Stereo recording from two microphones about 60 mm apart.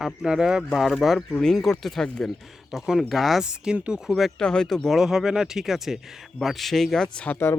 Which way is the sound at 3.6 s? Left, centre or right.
Centre.